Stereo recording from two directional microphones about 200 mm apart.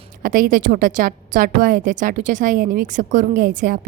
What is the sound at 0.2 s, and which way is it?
A woman's voice, 45° right (ahead or behind).